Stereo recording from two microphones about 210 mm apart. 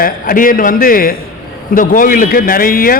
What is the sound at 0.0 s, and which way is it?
A man's voice, 40° left (ahead or behind).